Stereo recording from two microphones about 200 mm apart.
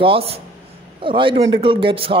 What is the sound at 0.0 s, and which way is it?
A man's voice, 30° right (ahead or behind).